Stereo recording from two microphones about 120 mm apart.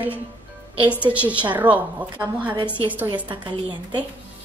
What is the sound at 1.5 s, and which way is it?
A woman's voice, 15° right (ahead or behind).